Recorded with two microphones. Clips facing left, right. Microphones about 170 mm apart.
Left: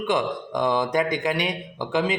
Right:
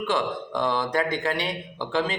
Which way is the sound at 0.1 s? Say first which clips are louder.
Left 3 dB; 15° left (ahead or behind).